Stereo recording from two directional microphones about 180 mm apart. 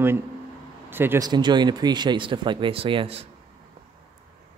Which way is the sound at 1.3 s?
25° right (ahead or behind).